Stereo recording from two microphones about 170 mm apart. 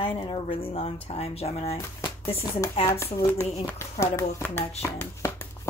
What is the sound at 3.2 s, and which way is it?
Speech, 15° left (ahead or behind).